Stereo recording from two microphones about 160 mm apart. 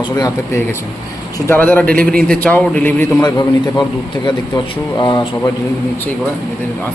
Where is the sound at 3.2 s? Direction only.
25° left (ahead or behind).